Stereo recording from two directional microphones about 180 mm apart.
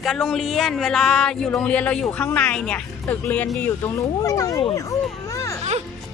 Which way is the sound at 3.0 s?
10° left (ahead or behind).